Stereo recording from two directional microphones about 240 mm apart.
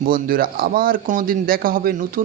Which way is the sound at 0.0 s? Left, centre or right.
Right.